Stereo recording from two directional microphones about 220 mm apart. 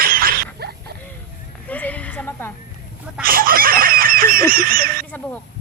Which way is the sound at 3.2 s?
40° right (ahead or behind).